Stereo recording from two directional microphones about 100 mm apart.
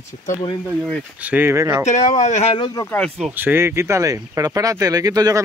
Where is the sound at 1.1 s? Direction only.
15° right (ahead or behind).